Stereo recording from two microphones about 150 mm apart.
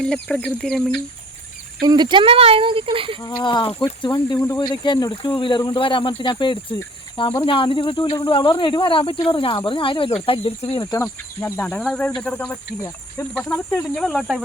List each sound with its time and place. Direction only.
0.0 s speech: 5° left (ahead or behind)
1.8 s speech: 30° right (ahead or behind)
3.2 s speech: 25° left (ahead or behind)
10.6 s speech: 20° left (ahead or behind)
11.7 s speech: 5° left (ahead or behind)